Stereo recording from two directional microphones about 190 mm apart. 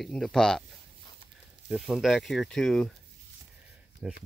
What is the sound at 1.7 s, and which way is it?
Speech, centre (ahead or behind).